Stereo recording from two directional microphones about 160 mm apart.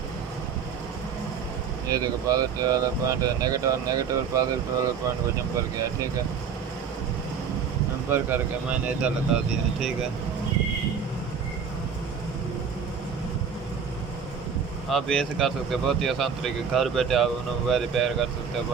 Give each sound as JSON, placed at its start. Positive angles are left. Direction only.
{"t": 1.9, "sound": "speech", "side_deg": -20}
{"t": 8.1, "sound": "speech", "side_deg": -10}
{"t": 14.8, "sound": "speech", "side_deg": 0}